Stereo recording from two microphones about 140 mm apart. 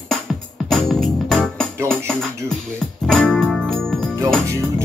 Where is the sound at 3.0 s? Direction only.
5° left (ahead or behind).